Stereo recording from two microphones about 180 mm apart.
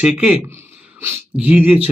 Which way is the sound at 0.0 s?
5° right (ahead or behind).